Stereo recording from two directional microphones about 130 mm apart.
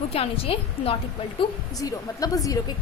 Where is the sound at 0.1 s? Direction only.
50° left (ahead or behind).